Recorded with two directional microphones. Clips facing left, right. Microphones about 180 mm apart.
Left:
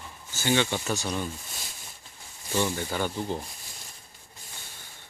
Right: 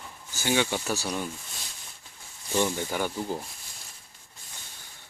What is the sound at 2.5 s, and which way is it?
Speech, 15° right (ahead or behind).